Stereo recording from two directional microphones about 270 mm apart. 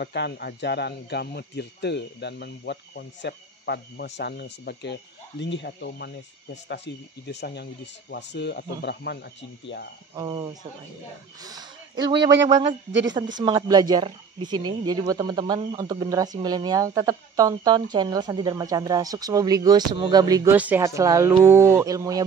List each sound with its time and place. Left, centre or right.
0.0 s speech: left
10.1 s a woman's voice: centre
13.4 s a woman's voice: centre